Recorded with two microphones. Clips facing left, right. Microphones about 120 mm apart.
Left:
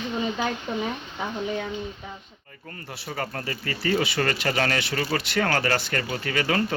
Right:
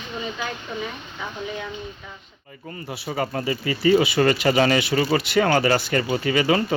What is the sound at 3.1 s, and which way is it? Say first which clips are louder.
Speech: right 6 dB; 10° right (ahead or behind).